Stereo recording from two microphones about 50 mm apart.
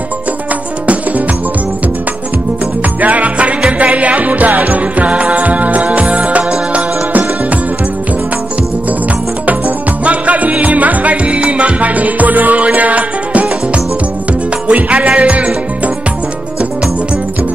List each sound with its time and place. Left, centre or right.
3.0 s music: right
10.0 s music: right
14.7 s music: right